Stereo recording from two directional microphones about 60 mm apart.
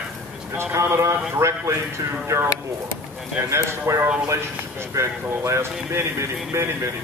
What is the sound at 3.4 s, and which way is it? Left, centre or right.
Speech, right.